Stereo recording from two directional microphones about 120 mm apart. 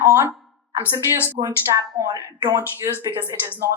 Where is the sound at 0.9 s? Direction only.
20° left (ahead or behind).